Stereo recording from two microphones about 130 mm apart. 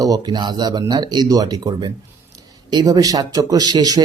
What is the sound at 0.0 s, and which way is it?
A man's voice, 30° right (ahead or behind).